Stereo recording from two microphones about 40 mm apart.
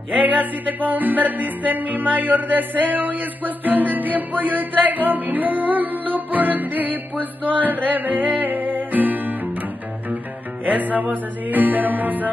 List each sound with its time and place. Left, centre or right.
0.1 s music: right
10.6 s music: right